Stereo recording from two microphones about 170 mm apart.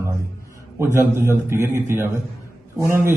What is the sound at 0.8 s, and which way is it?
A man's voice, 15° right (ahead or behind).